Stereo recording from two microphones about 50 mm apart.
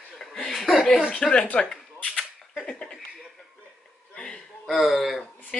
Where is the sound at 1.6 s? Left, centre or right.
Centre.